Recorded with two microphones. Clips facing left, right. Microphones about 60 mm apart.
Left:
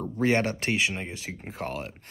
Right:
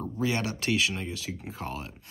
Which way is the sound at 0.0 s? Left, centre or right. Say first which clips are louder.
Left 5 dB; left.